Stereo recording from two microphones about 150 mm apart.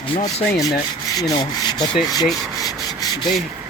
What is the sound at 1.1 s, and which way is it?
Speech, 25° left (ahead or behind).